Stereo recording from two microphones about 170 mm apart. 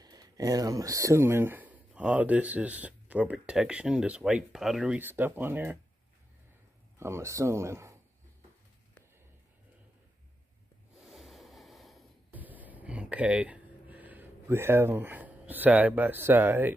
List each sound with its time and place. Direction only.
0.0 s speech: 20° right (ahead or behind)
7.0 s speech: 15° right (ahead or behind)
11.0 s a sound: centre (ahead or behind)